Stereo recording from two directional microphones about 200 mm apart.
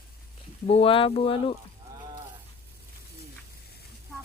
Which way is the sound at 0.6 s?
30° left (ahead or behind).